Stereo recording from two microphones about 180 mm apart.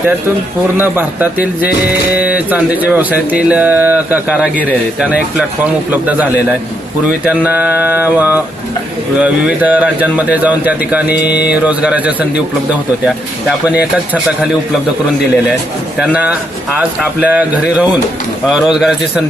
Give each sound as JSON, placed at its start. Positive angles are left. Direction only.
{"t": 0.8, "sound": "speech", "side_deg": -10}
{"t": 11.1, "sound": "mantra", "side_deg": 65}
{"t": 11.4, "sound": "speech", "side_deg": -10}
{"t": 13.7, "sound": "speech", "side_deg": -5}
{"t": 16.0, "sound": "a man's voice", "side_deg": -10}